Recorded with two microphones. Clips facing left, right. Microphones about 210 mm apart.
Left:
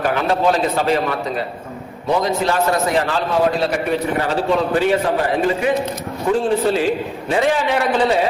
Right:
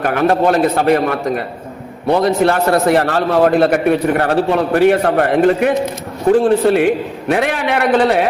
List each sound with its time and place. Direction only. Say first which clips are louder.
0.0 s a man's voice: right 4 dB; 55° right (ahead or behind)
2.0 s a man's voice: right 5 dB; 65° right (ahead or behind)